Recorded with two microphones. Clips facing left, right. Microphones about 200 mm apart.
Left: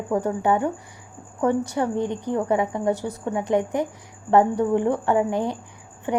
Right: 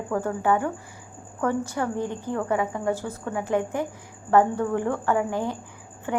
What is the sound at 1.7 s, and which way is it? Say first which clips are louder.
A woman's voice: left 4 dB; 20° left (ahead or behind).